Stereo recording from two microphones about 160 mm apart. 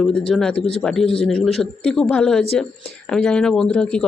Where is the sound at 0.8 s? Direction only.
5° left (ahead or behind).